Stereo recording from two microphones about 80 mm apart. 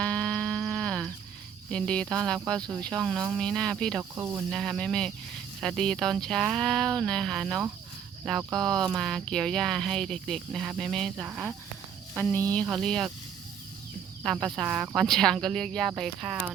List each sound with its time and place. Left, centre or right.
0.0 s a sound: centre
1.7 s speech: centre
4.1 s cricket: right
4.5 s speech: centre
12.1 s speech: left
12.7 s speech: centre
14.4 s speech: centre